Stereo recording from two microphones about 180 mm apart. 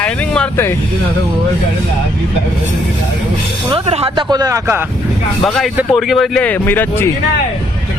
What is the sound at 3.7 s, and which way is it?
Speech, 35° right (ahead or behind).